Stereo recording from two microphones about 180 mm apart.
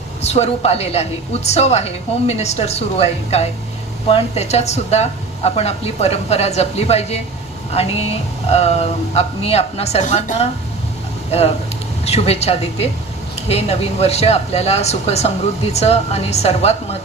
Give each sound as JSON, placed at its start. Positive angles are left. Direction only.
{"t": 0.2, "sound": "speech", "side_deg": 35}